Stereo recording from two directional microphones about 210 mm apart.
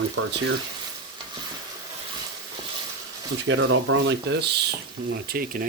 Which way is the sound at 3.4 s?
70° right (ahead or behind).